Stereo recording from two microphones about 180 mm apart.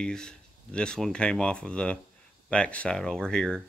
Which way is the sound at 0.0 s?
5° left (ahead or behind).